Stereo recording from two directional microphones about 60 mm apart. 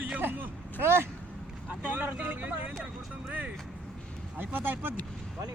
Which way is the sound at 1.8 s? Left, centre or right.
Right.